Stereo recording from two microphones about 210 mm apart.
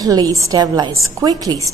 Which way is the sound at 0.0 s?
15° right (ahead or behind).